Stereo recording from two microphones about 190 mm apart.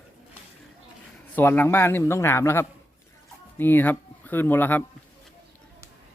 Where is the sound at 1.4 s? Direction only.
10° left (ahead or behind).